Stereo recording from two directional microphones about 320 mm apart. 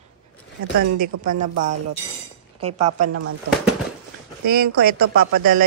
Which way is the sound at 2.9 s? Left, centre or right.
Right.